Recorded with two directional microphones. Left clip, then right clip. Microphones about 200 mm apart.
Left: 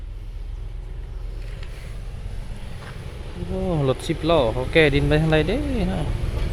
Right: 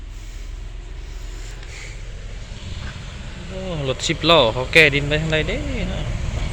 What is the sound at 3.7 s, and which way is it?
Insect, 30° left (ahead or behind).